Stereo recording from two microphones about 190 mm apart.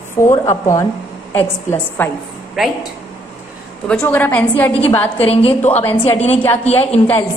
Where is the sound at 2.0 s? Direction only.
10° left (ahead or behind).